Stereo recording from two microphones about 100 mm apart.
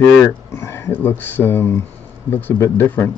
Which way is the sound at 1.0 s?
20° left (ahead or behind).